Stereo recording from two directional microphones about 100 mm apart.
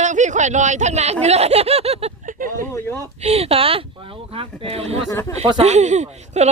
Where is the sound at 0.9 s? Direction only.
90° right.